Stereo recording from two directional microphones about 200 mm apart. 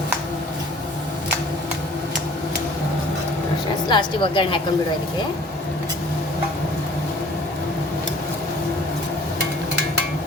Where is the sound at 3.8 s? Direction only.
25° left (ahead or behind).